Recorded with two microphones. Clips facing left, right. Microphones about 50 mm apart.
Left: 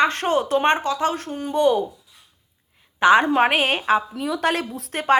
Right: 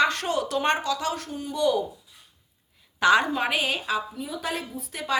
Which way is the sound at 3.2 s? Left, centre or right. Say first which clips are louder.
Left 7 dB; left.